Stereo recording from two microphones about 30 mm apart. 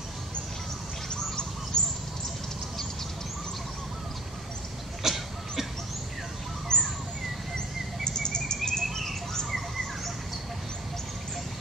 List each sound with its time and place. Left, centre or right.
1.1 s bird: left
5.0 s a sound: centre
6.7 s bird: left